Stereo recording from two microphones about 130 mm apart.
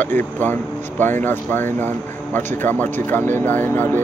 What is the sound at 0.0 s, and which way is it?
Speech, 15° left (ahead or behind).